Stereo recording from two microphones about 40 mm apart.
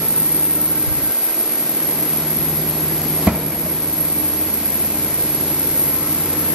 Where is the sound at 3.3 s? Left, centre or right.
Right.